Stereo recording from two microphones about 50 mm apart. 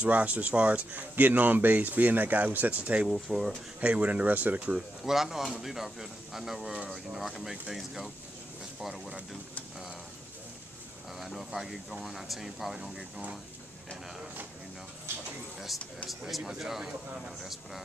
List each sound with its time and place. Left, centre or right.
0.0 s speech: right
3.1 s speech: centre
3.8 s speech: right
4.6 s speech: right
5.0 s speech: centre
11.1 s speech: centre
16.1 s speech: centre